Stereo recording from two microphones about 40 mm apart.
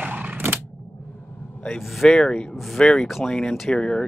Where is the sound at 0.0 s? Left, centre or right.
Right.